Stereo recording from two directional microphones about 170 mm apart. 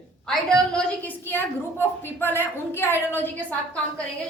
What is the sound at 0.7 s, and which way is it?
A woman's voice, 10° left (ahead or behind).